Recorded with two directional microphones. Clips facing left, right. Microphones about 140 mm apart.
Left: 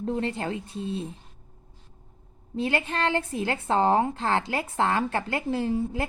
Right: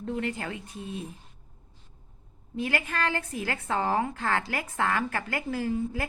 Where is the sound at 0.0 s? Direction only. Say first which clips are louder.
Left 3 dB; 30° left (ahead or behind).